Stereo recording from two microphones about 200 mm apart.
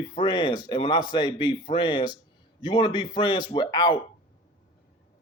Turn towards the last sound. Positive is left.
turn(degrees=20)  # may be behind; listen again after turning